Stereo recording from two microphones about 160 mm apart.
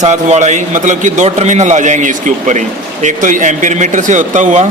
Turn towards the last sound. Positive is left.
turn(degrees=-50)  # may be behind; listen again after turning